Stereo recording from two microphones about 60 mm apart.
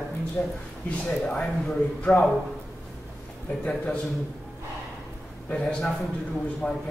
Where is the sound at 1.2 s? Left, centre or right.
Centre.